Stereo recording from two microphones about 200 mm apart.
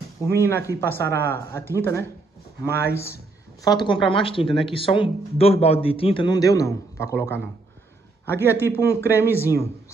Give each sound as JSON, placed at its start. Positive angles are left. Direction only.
{"t": 0.2, "sound": "a man's voice", "side_deg": 15}